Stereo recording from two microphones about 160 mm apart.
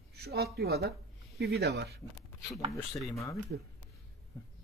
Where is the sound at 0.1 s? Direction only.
85° right.